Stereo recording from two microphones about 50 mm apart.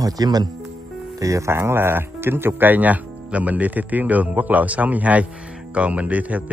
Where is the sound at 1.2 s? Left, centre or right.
Right.